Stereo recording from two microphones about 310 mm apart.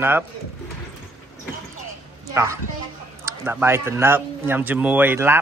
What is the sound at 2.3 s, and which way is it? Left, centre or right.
Speech, centre.